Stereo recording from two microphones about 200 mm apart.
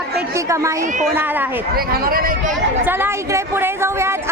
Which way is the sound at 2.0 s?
45° right (ahead or behind).